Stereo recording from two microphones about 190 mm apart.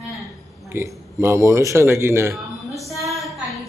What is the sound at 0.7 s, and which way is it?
A man's voice, 15° right (ahead or behind).